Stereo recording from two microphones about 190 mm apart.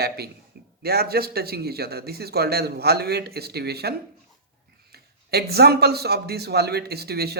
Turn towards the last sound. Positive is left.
turn(degrees=-55)  # may be behind; listen again after turning